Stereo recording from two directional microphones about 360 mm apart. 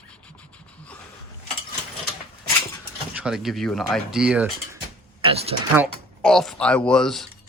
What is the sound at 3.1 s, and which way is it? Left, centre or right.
Speech, centre.